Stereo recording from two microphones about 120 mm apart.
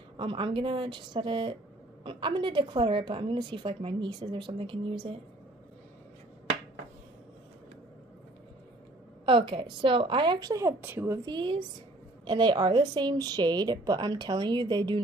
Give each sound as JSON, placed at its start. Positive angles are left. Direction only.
{"t": 0.2, "sound": "a woman's voice", "side_deg": -45}
{"t": 9.2, "sound": "a woman's voice", "side_deg": -40}
{"t": 10.8, "sound": "speech", "side_deg": -15}
{"t": 11.2, "sound": "a woman's voice", "side_deg": -40}